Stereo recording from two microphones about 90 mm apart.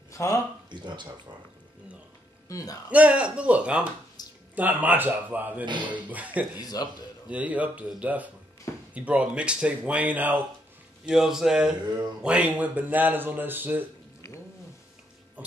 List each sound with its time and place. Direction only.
0.1 s a sound: 35° left (ahead or behind)
0.7 s speech: 60° right (ahead or behind)
2.4 s speech: 40° left (ahead or behind)
2.9 s speech: 15° right (ahead or behind)
4.2 s a sound: 50° left (ahead or behind)
4.6 s speech: 20° right (ahead or behind)
6.6 s a man's voice: 50° left (ahead or behind)
7.2 s speech: 15° right (ahead or behind)
11.1 s speech: 5° right (ahead or behind); by 13.8 s 20° right (ahead or behind)